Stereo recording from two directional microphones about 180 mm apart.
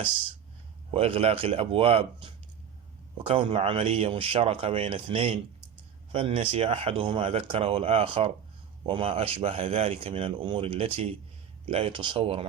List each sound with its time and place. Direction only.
0.9 s speech: 35° right (ahead or behind)